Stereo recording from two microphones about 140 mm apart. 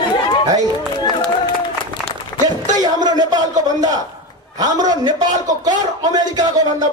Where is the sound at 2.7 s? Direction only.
30° right (ahead or behind).